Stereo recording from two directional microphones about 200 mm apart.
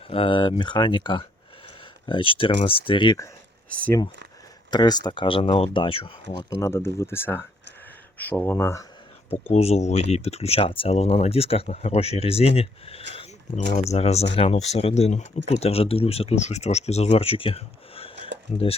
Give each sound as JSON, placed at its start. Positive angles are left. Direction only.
{"t": 0.1, "sound": "speech", "side_deg": 25}
{"t": 3.7, "sound": "speech", "side_deg": 5}
{"t": 4.7, "sound": "speech", "side_deg": 20}
{"t": 6.6, "sound": "speech", "side_deg": 15}
{"t": 9.5, "sound": "speech", "side_deg": 30}